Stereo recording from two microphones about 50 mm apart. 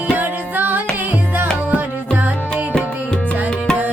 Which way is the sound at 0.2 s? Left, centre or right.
Right.